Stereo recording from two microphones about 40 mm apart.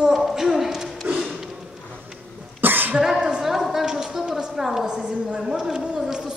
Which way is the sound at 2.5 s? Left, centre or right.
Right.